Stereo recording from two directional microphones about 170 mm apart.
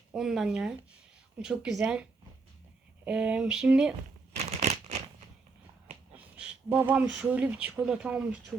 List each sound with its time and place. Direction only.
0.1 s speech: centre (ahead or behind)
4.3 s a sound: 40° right (ahead or behind)
6.1 s speech: 5° right (ahead or behind)